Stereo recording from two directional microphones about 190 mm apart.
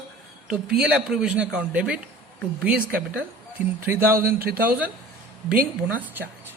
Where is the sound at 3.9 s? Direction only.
10° right (ahead or behind).